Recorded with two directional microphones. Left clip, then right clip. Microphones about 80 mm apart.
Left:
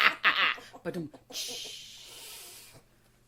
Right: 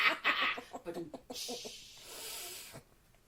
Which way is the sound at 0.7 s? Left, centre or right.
Right.